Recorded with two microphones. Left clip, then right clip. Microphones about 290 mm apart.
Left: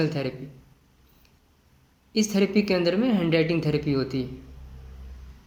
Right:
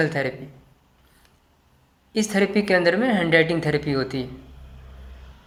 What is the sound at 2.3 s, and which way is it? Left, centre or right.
Speech, right.